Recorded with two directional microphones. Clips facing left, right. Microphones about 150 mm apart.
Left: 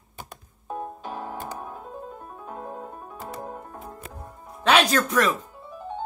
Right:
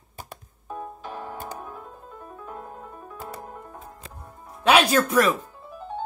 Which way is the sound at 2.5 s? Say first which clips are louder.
Left 3 dB; 40° left (ahead or behind).